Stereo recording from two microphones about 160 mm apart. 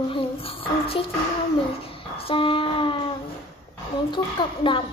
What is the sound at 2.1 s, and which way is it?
Child singing, 35° left (ahead or behind).